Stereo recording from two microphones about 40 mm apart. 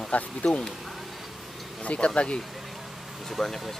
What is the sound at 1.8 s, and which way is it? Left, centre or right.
Speech, left.